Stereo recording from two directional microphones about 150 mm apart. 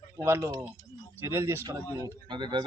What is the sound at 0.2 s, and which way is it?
Speech, 20° right (ahead or behind).